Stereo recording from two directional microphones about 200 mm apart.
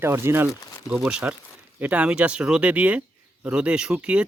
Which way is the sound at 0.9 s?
5° right (ahead or behind).